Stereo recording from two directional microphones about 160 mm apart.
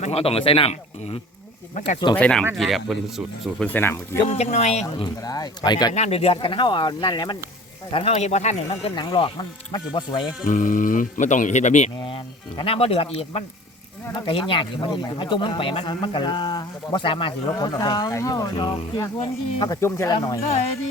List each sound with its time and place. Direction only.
0.0 s speech: 40° left (ahead or behind)
2.1 s speech: 10° left (ahead or behind)
3.7 s speech: 15° left (ahead or behind)
4.2 s speech: 40° left (ahead or behind)
5.0 s speech: 25° left (ahead or behind)
5.9 s speech: 40° left (ahead or behind)
10.4 s speech: 55° left (ahead or behind)
11.9 s speech: 30° left (ahead or behind)